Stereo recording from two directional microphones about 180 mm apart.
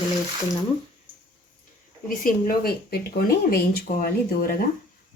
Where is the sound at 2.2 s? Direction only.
55° left (ahead or behind).